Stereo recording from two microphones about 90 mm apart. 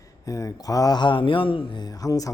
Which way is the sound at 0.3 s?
40° left (ahead or behind).